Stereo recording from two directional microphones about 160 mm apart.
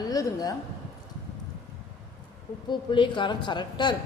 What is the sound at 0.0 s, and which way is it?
Speech, 25° left (ahead or behind).